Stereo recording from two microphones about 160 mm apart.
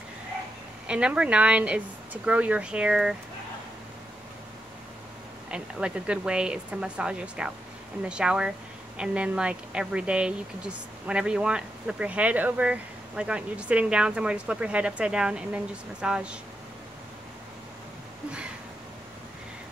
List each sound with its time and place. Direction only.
0.8 s a woman's voice: 5° right (ahead or behind)
5.5 s a woman's voice: 5° right (ahead or behind)